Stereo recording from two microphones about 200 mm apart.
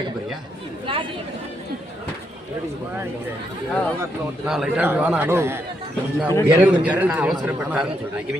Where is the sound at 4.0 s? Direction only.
5° right (ahead or behind).